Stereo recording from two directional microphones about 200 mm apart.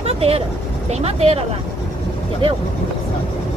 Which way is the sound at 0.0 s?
30° right (ahead or behind).